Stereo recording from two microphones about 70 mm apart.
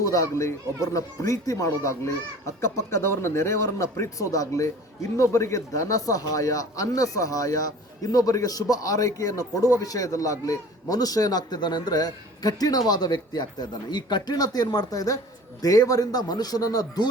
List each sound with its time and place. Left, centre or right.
0.0 s speech: left